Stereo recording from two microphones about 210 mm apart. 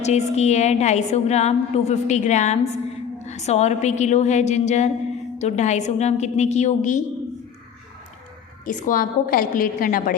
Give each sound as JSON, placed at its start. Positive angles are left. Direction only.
{"t": 0.0, "sound": "a woman's voice", "side_deg": 30}
{"t": 8.6, "sound": "a woman's voice", "side_deg": 40}